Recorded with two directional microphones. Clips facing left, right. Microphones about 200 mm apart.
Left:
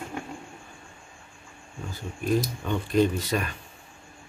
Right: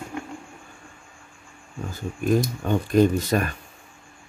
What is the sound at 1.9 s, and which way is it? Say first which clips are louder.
Speech: right 4 dB; 45° right (ahead or behind).